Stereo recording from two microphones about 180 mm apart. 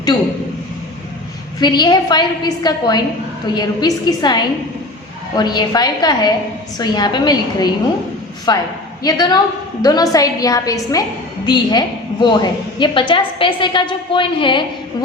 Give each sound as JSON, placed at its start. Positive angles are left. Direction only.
{"t": 1.5, "sound": "a woman's voice", "side_deg": 25}